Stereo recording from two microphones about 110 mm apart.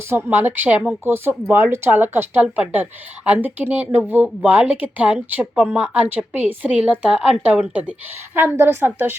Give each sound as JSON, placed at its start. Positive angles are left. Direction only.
{"t": 0.1, "sound": "a woman's voice", "side_deg": -20}